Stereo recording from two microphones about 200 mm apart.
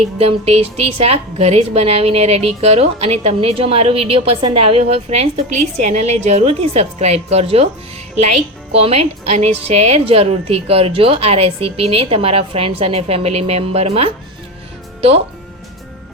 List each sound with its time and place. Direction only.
0.0 s a woman's voice: 30° right (ahead or behind)
8.7 s a woman's voice: 30° right (ahead or behind)